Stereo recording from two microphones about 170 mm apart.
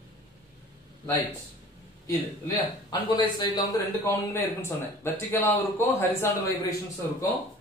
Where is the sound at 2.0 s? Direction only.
20° left (ahead or behind).